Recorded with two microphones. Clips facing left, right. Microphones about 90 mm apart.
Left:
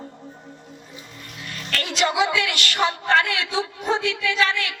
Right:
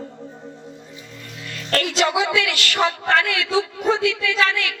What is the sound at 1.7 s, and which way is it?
Speech, 40° right (ahead or behind).